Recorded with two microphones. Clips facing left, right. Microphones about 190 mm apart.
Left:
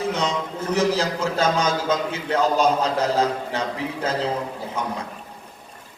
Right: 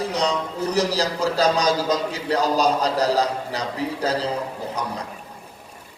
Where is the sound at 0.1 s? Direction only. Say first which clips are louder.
Right 1 dB; 35° right (ahead or behind).